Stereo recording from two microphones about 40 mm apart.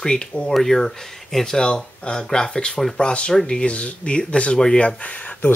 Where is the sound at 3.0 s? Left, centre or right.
Left.